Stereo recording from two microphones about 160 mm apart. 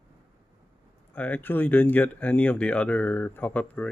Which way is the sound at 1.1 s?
10° left (ahead or behind).